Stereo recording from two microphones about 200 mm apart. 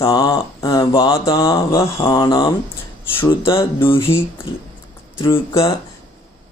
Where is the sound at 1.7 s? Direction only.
15° left (ahead or behind).